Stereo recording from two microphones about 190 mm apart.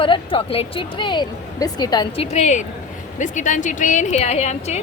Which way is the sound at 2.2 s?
35° left (ahead or behind).